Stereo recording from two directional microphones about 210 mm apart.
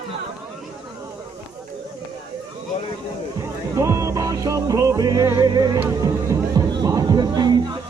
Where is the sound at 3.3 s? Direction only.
15° right (ahead or behind).